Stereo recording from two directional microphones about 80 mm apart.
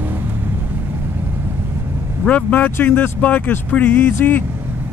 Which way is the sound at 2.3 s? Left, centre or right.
Centre.